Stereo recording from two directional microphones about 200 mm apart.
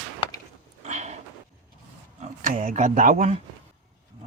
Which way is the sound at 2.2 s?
40° right (ahead or behind).